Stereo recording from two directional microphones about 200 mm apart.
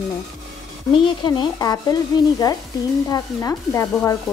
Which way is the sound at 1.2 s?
20° left (ahead or behind).